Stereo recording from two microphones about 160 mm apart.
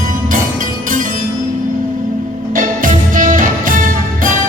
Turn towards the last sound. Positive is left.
turn(degrees=-55)  # may be behind; listen again after turning